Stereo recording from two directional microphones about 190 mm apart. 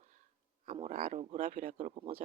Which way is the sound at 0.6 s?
40° right (ahead or behind).